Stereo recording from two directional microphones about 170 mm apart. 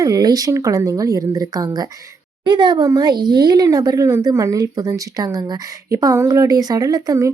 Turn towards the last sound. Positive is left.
turn(degrees=-20)  # may be behind; listen again after turning